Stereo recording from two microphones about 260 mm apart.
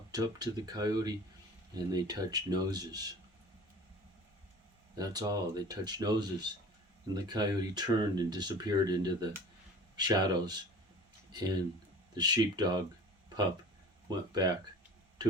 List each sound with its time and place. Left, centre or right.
0.1 s speech: centre
4.9 s speech: centre
14.1 s speech: centre